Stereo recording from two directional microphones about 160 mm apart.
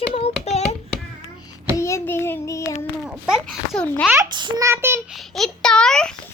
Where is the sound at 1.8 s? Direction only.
15° left (ahead or behind).